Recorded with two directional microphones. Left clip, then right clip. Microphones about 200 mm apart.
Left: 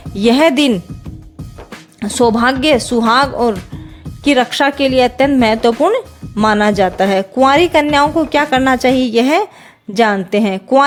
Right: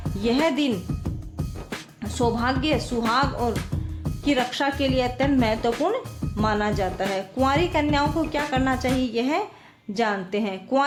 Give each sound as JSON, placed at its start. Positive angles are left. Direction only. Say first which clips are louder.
{"t": 0.2, "sound": "a woman's voice", "louder": "left 12 dB", "side_deg": 55}
{"t": 2.0, "sound": "a woman's voice", "louder": "left 12 dB", "side_deg": 45}